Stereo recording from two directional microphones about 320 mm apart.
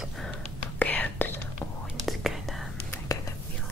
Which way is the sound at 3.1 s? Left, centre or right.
Centre.